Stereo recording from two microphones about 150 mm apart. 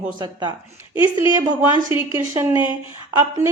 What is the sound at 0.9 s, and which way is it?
Speech, 35° left (ahead or behind).